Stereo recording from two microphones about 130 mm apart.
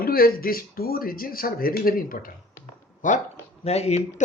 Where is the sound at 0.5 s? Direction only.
90° left.